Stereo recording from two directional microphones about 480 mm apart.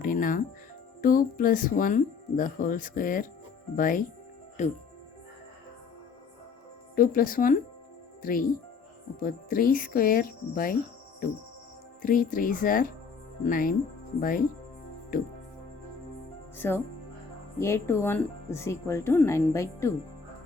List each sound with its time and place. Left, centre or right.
0.0 s music: centre
1.0 s speech: centre
6.9 s speech: centre
12.0 s speech: centre
16.6 s speech: centre